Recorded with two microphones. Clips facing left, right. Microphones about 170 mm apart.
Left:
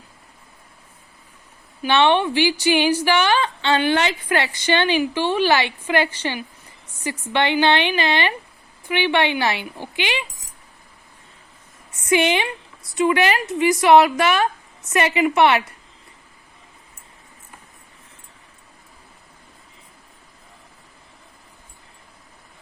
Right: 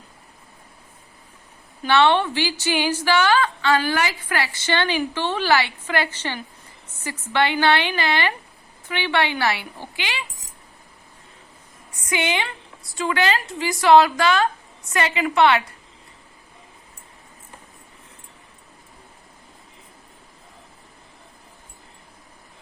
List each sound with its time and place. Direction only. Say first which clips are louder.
1.8 s a woman's voice: left 1 dB; 15° left (ahead or behind)
12.0 s a woman's voice: left 6 dB; 25° left (ahead or behind)